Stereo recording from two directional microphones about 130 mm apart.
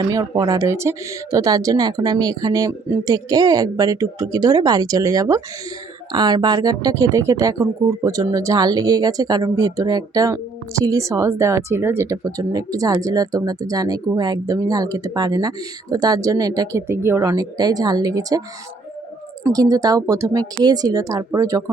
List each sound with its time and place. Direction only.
0.0 s speech: 30° right (ahead or behind)
19.5 s speech: 25° right (ahead or behind)